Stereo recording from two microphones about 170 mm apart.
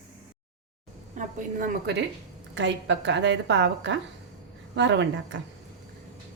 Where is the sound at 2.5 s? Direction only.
90° right.